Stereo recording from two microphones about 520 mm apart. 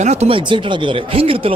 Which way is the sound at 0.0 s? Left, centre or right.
Centre.